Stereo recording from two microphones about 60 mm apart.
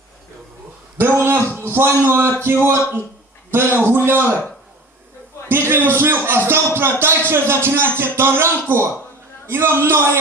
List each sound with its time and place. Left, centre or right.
0.9 s a sound: right
1.5 s a man's voice: right
5.5 s a man's voice: right